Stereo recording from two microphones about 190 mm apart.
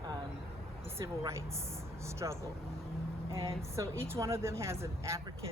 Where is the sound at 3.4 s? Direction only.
15° right (ahead or behind).